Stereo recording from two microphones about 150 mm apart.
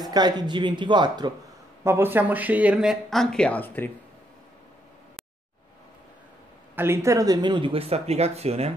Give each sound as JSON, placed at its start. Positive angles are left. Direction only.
{"t": 0.0, "sound": "speech", "side_deg": -25}
{"t": 1.9, "sound": "speech", "side_deg": -15}
{"t": 6.7, "sound": "speech", "side_deg": -15}